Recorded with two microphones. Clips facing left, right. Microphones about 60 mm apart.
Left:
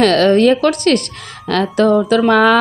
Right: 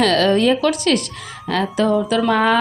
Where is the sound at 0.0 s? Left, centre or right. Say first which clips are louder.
Left 4 dB; left.